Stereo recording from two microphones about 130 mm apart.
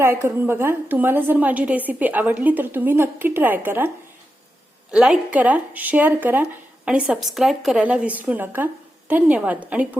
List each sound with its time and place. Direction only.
0.0 s speech: 20° right (ahead or behind)